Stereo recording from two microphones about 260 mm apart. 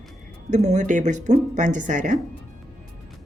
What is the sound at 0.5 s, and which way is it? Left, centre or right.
Speech, right.